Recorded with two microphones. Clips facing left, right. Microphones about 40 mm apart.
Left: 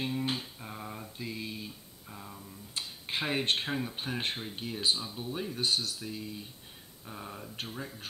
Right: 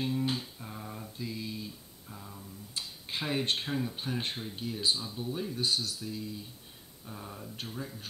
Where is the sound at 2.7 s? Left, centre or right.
Left.